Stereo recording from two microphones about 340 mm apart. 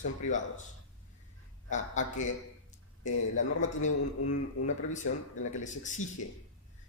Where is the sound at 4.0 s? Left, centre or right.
Left.